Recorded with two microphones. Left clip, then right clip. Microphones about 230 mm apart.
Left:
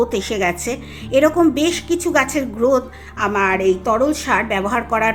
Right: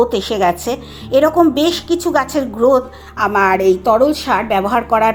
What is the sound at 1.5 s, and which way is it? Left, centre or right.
Speech, centre.